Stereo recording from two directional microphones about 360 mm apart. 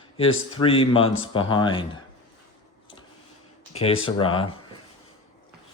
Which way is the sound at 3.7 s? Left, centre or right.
Centre.